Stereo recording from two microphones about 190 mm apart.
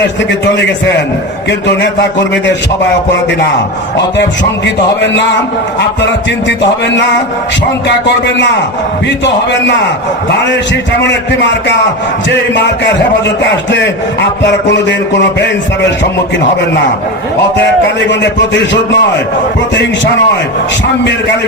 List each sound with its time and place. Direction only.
0.3 s a man's voice: 65° left (ahead or behind)
4.6 s a man's voice: 65° left (ahead or behind)
7.9 s a man's voice: 65° left (ahead or behind)
11.0 s a man's voice: 65° left (ahead or behind)
13.2 s a man's voice: 70° left (ahead or behind)
18.1 s a man's voice: 70° left (ahead or behind)